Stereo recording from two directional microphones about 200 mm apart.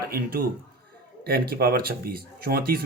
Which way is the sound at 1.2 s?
50° right (ahead or behind).